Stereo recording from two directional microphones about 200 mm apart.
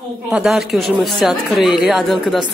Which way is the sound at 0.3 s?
5° right (ahead or behind).